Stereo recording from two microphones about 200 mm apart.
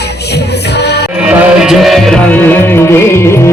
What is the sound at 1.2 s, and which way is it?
Music, 5° right (ahead or behind).